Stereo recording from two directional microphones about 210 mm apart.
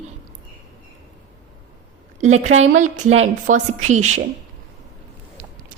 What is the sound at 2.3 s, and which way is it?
A woman's voice, 30° right (ahead or behind).